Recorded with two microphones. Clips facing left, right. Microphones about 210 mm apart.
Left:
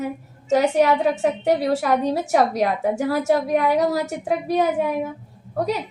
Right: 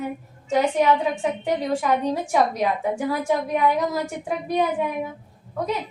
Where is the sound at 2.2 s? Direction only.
80° left.